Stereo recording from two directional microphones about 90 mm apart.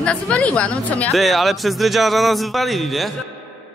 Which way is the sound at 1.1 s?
Centre (ahead or behind).